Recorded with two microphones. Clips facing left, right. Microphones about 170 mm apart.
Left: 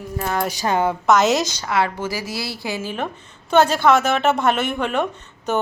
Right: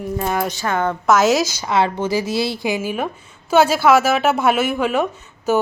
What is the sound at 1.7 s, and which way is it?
A woman's voice, 20° right (ahead or behind).